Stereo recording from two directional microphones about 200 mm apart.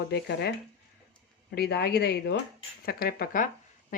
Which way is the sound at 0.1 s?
55° left (ahead or behind).